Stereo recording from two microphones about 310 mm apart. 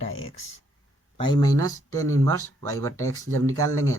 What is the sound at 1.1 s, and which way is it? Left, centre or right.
Speech, centre.